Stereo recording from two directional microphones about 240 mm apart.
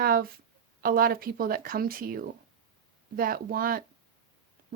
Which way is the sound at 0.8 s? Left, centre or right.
Right.